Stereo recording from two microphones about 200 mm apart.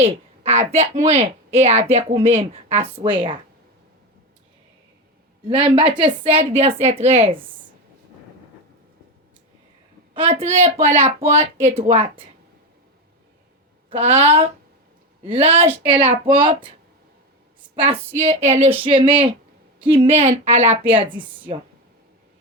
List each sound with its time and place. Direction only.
0.0 s a woman's voice: 30° right (ahead or behind)
5.5 s a woman's voice: 25° right (ahead or behind)
10.2 s a woman's voice: 30° right (ahead or behind)
13.9 s a woman's voice: 30° right (ahead or behind)
18.2 s a woman's voice: 30° right (ahead or behind)